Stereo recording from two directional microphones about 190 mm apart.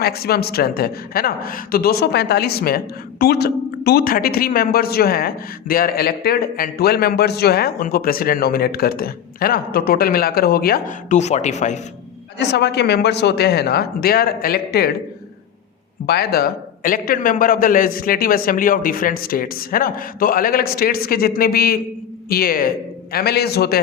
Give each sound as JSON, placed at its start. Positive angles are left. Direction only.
{"t": 0.0, "sound": "speech", "side_deg": 55}
{"t": 12.4, "sound": "speech", "side_deg": 60}
{"t": 16.0, "sound": "speech", "side_deg": 55}